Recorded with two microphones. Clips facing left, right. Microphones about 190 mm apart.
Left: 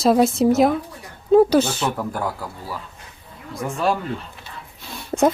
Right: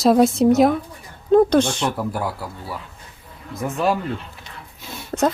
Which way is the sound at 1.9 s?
5° right (ahead or behind).